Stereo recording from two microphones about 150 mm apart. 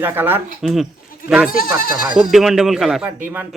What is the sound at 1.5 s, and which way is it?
Speech, 75° left (ahead or behind).